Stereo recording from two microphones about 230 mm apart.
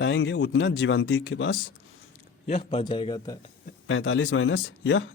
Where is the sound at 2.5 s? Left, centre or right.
Left.